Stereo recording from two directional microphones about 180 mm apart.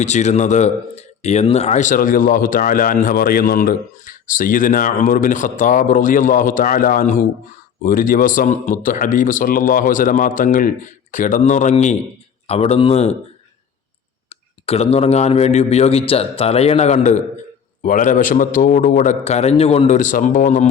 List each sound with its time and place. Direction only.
0.0 s speech: 40° left (ahead or behind)
14.3 s speech: 35° left (ahead or behind)